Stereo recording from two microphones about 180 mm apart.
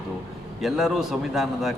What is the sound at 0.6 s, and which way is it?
A man's voice, centre (ahead or behind).